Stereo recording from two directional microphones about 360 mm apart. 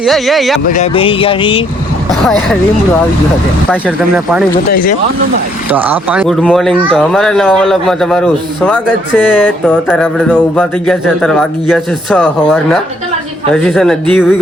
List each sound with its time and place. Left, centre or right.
0.0 s speech: centre
0.7 s speech: centre
2.0 s speech: centre
3.7 s speech: centre
4.7 s speech: left
5.7 s speech: centre